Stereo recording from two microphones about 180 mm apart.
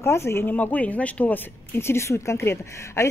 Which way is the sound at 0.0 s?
15° left (ahead or behind).